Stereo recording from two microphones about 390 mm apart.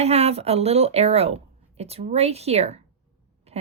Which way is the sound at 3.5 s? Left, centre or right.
Centre.